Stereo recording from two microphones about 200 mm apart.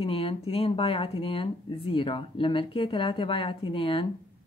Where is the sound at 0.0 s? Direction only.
25° left (ahead or behind).